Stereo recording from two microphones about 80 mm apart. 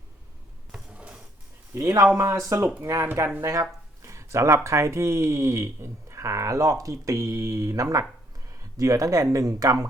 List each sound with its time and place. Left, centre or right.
0.7 s mechanisms: centre
1.7 s speech: right